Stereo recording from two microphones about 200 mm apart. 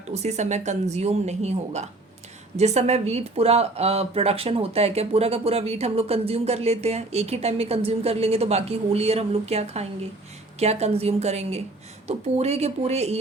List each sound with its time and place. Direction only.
0.1 s speech: 35° right (ahead or behind)